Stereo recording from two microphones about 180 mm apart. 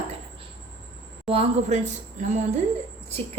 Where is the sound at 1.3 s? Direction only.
35° right (ahead or behind).